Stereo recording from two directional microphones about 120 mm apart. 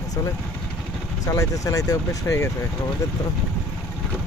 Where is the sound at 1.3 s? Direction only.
25° left (ahead or behind).